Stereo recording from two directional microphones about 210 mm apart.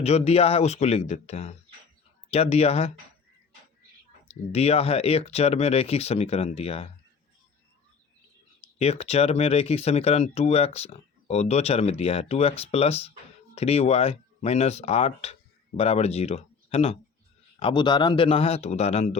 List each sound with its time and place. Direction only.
0.0 s speech: 30° left (ahead or behind)
4.3 s speech: 30° left (ahead or behind)
8.8 s speech: 30° left (ahead or behind)